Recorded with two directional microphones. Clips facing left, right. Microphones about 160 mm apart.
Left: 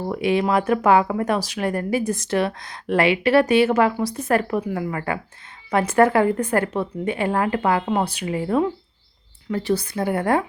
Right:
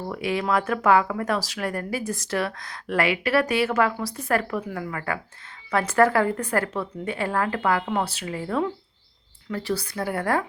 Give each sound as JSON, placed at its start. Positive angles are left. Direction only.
{"t": 0.0, "sound": "speech", "side_deg": 20}